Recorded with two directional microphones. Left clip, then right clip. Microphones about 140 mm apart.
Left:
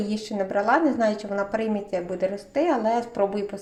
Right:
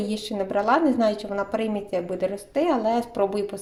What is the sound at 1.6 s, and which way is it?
Speech, 10° right (ahead or behind).